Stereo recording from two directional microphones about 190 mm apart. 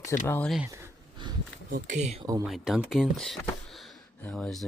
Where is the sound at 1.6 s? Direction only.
45° right (ahead or behind).